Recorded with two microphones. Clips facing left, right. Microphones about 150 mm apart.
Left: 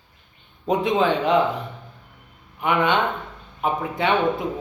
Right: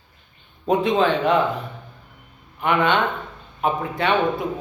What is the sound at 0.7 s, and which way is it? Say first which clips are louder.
A man's voice: right 1 dB; 15° left (ahead or behind).